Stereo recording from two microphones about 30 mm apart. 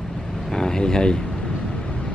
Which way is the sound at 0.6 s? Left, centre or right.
Left.